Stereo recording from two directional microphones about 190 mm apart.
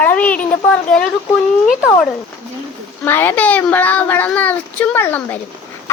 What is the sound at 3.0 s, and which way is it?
A child's voice, 10° left (ahead or behind).